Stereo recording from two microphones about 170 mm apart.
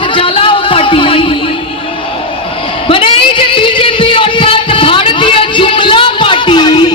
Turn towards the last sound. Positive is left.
turn(degrees=25)  # may be behind; listen again after turning